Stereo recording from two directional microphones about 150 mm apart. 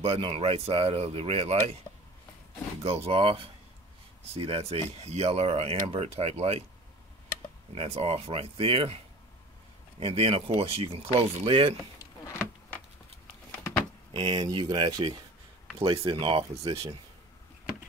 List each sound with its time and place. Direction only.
0.0 s speech: 40° right (ahead or behind)
2.8 s speech: 40° right (ahead or behind)
7.7 s speech: 45° right (ahead or behind)
14.1 s speech: 30° right (ahead or behind)